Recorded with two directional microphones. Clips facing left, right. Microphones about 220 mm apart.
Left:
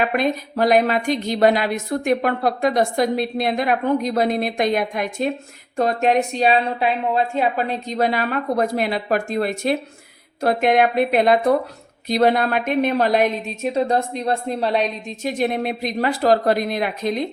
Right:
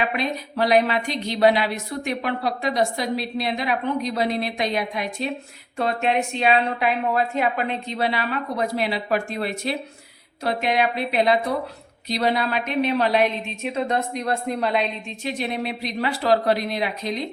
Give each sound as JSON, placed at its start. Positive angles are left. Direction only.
{"t": 0.0, "sound": "speech", "side_deg": 45}